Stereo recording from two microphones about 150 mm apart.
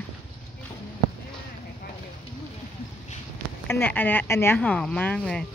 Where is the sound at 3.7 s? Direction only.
15° left (ahead or behind).